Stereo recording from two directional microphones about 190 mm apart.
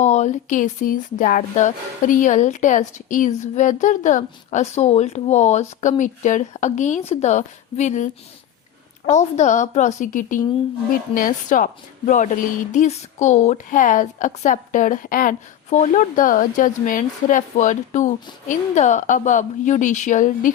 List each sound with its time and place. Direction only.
0.0 s speech: 40° left (ahead or behind)
9.1 s a woman's voice: 40° left (ahead or behind)